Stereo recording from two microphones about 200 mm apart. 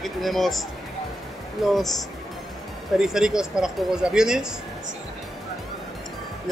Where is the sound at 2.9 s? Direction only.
5° right (ahead or behind).